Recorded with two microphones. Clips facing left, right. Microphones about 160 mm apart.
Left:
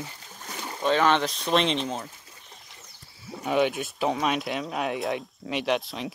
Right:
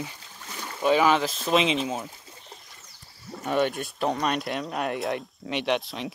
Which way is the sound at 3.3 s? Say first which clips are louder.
Left 1 dB; 5° left (ahead or behind).